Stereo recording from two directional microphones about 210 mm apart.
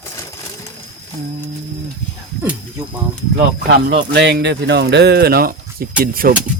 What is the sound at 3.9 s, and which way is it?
Speech, 55° right (ahead or behind).